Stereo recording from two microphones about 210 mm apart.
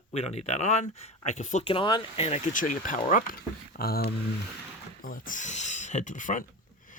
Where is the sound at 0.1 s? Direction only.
30° left (ahead or behind).